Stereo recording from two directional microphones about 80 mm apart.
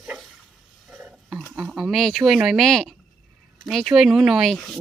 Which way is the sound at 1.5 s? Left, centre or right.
Centre.